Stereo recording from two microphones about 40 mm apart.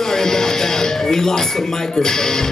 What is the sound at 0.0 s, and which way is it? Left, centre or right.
Speech, centre.